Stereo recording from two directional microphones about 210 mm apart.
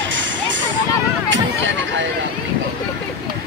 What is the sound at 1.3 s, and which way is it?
Hubbub, 60° right (ahead or behind).